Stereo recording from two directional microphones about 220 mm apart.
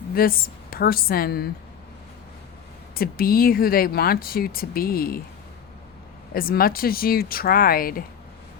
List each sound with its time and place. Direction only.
0.1 s a woman's voice: 40° left (ahead or behind)
2.9 s speech: 40° left (ahead or behind)
6.3 s speech: 40° left (ahead or behind)